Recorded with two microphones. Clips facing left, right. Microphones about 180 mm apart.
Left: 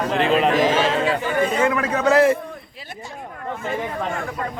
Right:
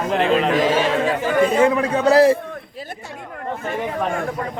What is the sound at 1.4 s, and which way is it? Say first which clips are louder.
Speech: right 5 dB; 30° right (ahead or behind).